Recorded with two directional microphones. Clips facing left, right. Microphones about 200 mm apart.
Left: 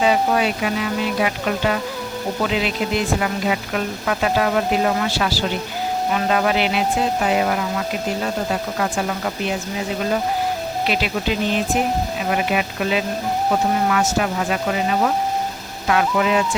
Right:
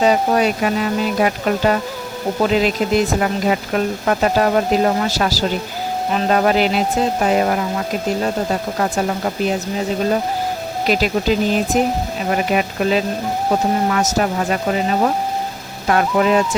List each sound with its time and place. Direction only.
0.0 s speech: 40° right (ahead or behind)
8.8 s speech: 40° right (ahead or behind)
10.8 s speech: 40° right (ahead or behind)